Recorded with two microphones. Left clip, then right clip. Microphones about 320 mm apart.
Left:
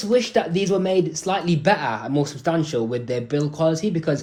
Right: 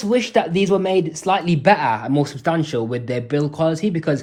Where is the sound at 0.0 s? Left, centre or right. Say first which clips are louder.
Right 2 dB; centre.